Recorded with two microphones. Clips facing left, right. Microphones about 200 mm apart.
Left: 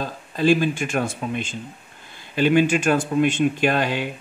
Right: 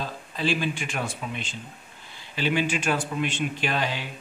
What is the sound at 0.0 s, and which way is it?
A man's voice, 45° left (ahead or behind).